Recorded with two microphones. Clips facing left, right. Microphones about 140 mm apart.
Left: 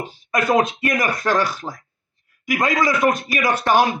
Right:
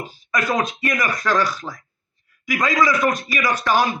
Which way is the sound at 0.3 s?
55° left (ahead or behind).